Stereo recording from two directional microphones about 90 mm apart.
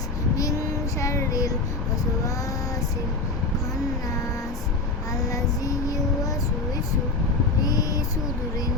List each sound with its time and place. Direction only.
0.9 s a sound: 35° left (ahead or behind)
5.2 s child singing: 40° left (ahead or behind)
7.6 s child singing: 40° left (ahead or behind)